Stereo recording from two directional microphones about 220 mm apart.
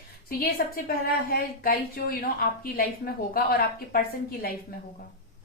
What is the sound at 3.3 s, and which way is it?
A woman's voice, 45° left (ahead or behind).